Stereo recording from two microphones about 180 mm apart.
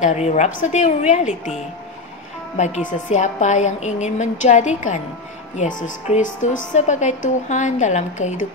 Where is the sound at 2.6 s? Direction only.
45° left (ahead or behind).